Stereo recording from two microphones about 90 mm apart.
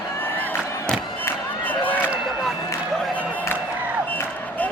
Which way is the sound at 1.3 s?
20° left (ahead or behind).